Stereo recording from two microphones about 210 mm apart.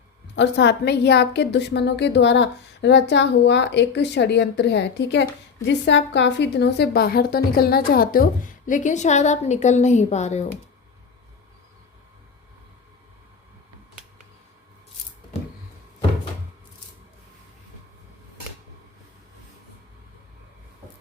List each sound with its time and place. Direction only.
0.3 s a woman's voice: 55° left (ahead or behind); by 10.4 s 35° left (ahead or behind)